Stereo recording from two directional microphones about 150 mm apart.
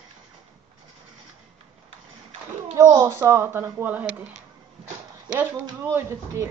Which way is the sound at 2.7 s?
25° right (ahead or behind).